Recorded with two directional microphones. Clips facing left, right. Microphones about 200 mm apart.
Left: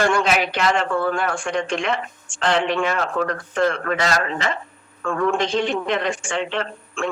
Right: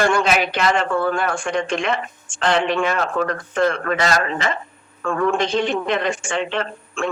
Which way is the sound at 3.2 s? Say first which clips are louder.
Right 1 dB; 50° right (ahead or behind).